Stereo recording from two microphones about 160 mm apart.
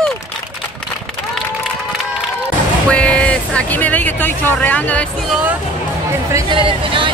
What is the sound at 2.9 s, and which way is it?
Speech, 5° left (ahead or behind).